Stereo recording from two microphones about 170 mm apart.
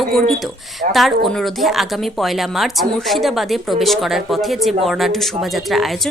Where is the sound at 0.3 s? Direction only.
Centre (ahead or behind).